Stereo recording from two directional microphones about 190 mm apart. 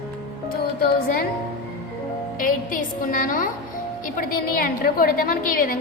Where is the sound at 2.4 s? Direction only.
45° left (ahead or behind).